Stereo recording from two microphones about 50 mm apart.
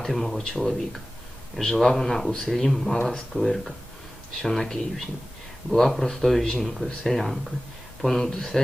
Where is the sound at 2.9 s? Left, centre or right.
Centre.